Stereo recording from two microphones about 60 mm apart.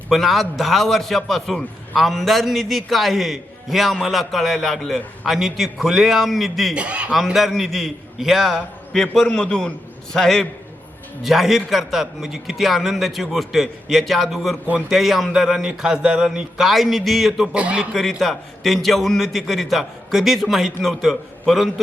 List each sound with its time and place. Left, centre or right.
0.1 s a man's voice: centre
6.7 s speech: right
7.3 s a man's voice: centre
17.5 s a man's voice: centre
18.2 s a man's voice: centre